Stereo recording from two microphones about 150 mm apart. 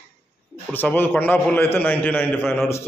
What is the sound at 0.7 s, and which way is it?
A man's voice, 10° left (ahead or behind).